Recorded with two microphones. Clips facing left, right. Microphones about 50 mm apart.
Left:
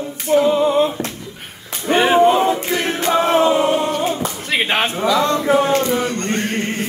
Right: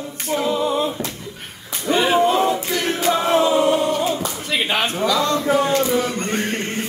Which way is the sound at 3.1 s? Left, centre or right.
Left.